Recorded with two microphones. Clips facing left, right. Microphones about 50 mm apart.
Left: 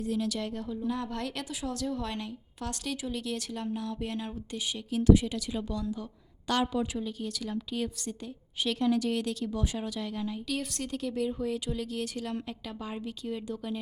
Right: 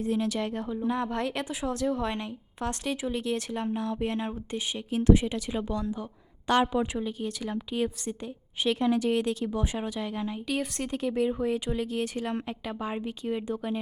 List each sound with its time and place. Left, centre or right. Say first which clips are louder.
0.0 s a woman's voice: right 3 dB; right